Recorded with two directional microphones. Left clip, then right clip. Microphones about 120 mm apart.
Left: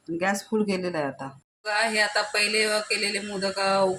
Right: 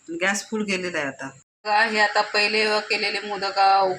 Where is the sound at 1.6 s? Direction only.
60° right (ahead or behind).